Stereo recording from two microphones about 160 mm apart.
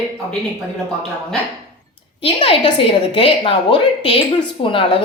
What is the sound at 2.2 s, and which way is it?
Speech, 35° left (ahead or behind).